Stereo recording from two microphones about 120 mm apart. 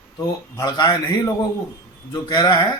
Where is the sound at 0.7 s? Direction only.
40° left (ahead or behind).